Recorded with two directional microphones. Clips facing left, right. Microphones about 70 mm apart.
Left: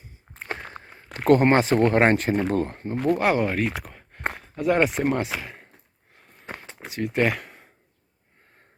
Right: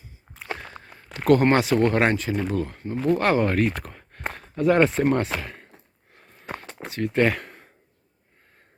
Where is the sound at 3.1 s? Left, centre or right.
Centre.